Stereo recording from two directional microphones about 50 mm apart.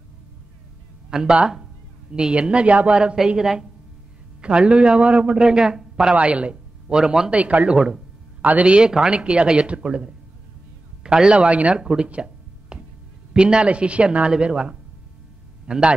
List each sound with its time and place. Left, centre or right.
1.1 s a man's voice: centre
2.9 s a man's voice: centre
6.1 s speech: right
7.2 s a man's voice: right
8.6 s a man's voice: centre
11.8 s speech: centre
12.1 s a sound: centre
13.3 s a man's voice: centre